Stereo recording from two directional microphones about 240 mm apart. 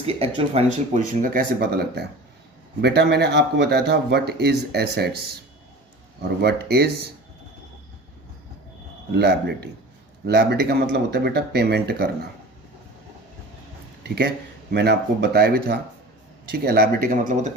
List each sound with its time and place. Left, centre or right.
0.0 s speech: right
9.1 s speech: right
14.0 s speech: right